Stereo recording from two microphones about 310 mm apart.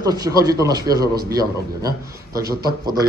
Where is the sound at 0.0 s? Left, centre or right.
Centre.